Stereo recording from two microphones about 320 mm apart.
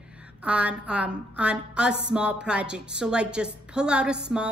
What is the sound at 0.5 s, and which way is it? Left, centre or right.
Speech, centre.